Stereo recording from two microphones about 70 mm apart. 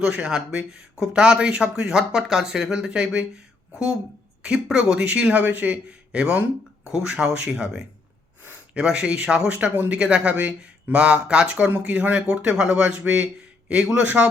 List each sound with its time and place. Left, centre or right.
0.0 s speech: centre